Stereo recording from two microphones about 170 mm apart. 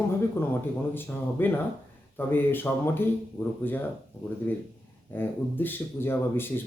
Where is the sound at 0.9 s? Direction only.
10° left (ahead or behind).